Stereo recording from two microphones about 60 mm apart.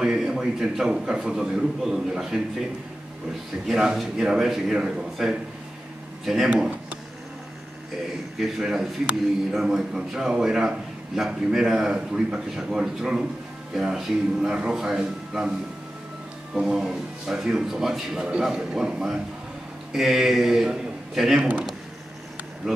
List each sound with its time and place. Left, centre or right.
0.0 s a man's voice: centre
3.6 s a man's voice: centre
6.5 s a sound: right
8.4 s a man's voice: centre
16.5 s a man's voice: centre